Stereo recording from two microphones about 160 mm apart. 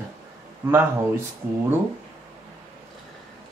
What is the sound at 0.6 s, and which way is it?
Speech, 15° right (ahead or behind).